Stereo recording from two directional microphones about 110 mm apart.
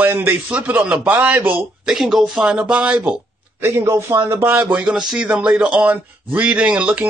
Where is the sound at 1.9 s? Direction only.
5° right (ahead or behind).